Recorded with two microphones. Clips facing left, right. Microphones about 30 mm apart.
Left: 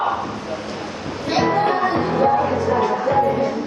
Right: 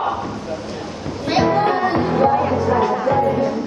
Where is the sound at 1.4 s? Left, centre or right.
Centre.